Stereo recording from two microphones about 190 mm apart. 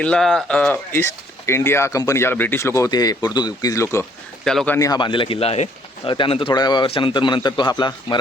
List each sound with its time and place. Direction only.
0.0 s speech: 5° left (ahead or behind)
4.4 s speech: 5° left (ahead or behind)
4.9 s a man's voice: 25° left (ahead or behind)